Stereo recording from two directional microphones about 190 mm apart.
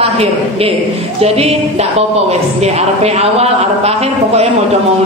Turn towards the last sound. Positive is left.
turn(degrees=-35)  # may be behind; listen again after turning